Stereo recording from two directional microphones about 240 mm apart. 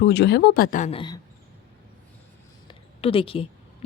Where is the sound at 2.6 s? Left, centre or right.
Left.